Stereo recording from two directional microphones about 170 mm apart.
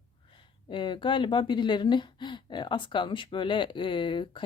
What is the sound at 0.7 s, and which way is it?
Speech, 30° left (ahead or behind).